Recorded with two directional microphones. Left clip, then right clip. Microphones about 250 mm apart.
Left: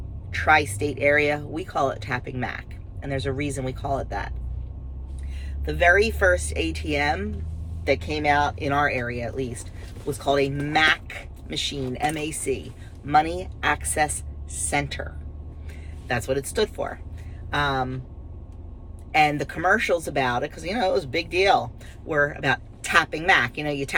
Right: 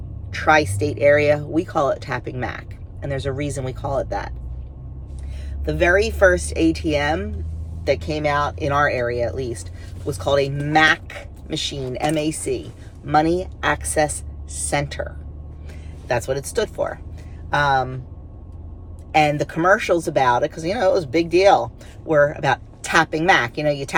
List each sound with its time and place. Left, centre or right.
0.3 s speech: centre
5.6 s speech: centre
16.0 s speech: centre
19.1 s speech: centre